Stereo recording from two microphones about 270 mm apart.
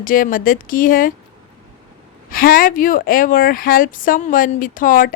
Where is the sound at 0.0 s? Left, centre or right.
Left.